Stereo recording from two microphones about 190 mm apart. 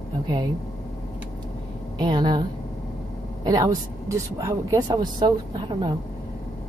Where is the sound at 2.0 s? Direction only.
20° right (ahead or behind).